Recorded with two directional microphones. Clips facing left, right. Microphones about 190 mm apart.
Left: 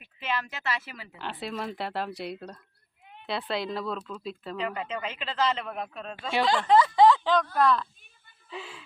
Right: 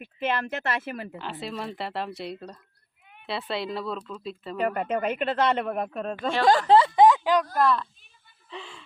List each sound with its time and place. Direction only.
0.0 s speech: 50° right (ahead or behind)
1.2 s speech: centre (ahead or behind)
4.6 s speech: 55° right (ahead or behind); by 7.4 s 15° right (ahead or behind)
7.6 s speech: centre (ahead or behind)